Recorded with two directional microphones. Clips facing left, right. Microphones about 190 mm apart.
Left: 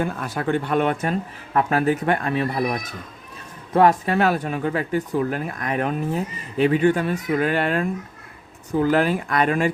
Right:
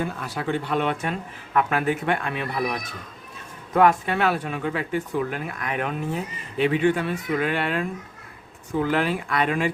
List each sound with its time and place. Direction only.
0.0 s speech: 50° left (ahead or behind)